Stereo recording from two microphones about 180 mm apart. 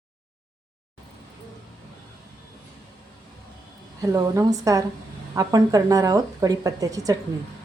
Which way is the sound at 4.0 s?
20° right (ahead or behind).